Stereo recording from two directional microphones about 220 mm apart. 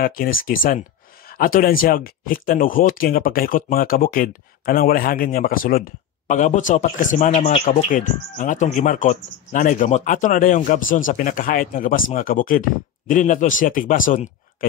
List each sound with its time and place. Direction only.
0.0 s speech: 40° left (ahead or behind)